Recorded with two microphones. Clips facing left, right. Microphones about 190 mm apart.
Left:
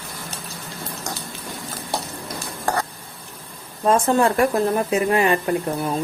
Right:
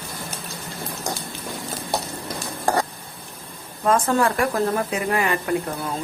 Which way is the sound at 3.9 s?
25° left (ahead or behind).